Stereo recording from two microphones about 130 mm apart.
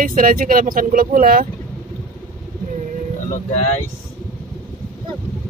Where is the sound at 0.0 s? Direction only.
90° right.